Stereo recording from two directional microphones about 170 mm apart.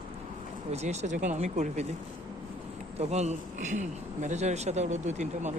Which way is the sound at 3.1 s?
40° right (ahead or behind).